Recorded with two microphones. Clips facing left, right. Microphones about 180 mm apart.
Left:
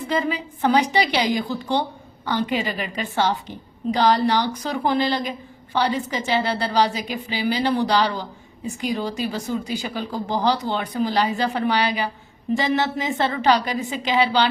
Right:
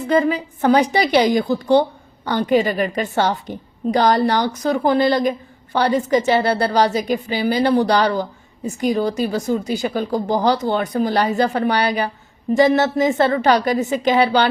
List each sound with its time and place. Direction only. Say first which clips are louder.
0.1 s a woman's voice: right 7 dB; 50° right (ahead or behind)